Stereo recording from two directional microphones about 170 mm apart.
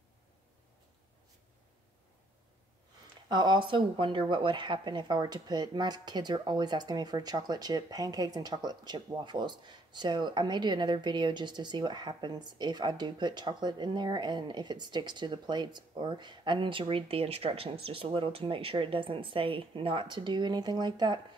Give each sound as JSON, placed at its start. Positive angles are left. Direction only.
{"t": 3.3, "sound": "a woman's voice", "side_deg": -25}